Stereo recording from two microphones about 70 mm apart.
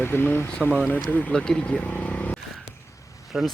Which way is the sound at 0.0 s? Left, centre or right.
Left.